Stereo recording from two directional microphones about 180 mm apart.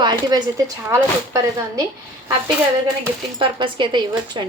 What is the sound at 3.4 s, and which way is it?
Speech, 25° right (ahead or behind).